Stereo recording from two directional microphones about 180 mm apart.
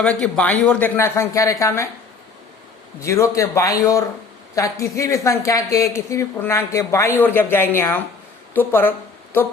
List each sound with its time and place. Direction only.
0.0 s a woman's voice: 5° left (ahead or behind)
3.0 s a woman's voice: 15° left (ahead or behind)